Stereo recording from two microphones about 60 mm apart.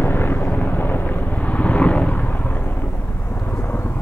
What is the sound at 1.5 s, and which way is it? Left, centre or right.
Vehicle, left.